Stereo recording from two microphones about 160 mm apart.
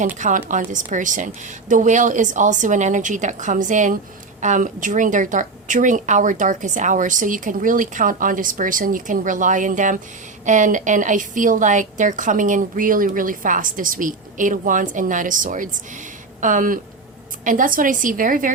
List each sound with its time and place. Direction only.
0.2 s a woman's voice: 50° right (ahead or behind)